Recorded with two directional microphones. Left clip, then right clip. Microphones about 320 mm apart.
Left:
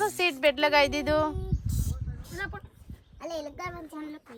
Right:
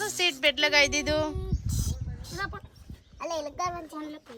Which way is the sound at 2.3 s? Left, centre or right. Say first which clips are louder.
Right 1 dB; centre.